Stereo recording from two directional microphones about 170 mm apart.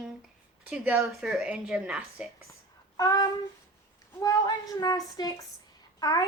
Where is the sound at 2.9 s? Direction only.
20° left (ahead or behind).